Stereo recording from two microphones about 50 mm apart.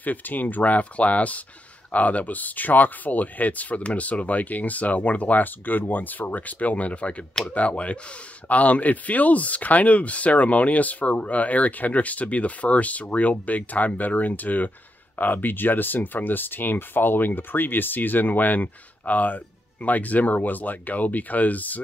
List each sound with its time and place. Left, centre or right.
0.0 s speech: left